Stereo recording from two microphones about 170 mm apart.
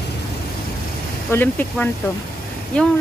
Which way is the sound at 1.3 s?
10° left (ahead or behind).